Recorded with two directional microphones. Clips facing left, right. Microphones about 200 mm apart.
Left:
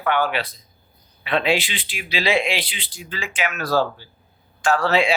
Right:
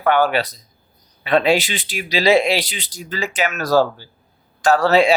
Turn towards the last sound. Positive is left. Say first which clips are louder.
# right 5 dB
turn(degrees=-40)  # may be behind; listen again after turning